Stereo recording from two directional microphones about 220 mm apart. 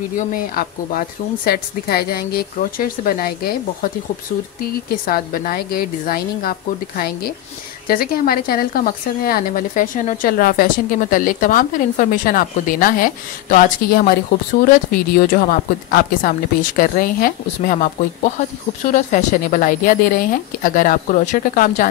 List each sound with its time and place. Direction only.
0.3 s a woman's voice: 40° left (ahead or behind)
7.9 s speech: 40° left (ahead or behind)